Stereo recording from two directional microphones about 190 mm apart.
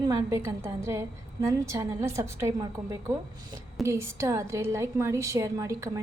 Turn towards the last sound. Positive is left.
turn(degrees=-15)  # may be behind; listen again after turning